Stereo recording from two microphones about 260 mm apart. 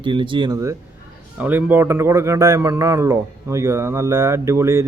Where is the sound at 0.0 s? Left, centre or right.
Centre.